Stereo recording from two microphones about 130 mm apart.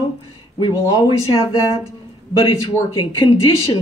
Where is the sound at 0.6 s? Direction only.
35° left (ahead or behind).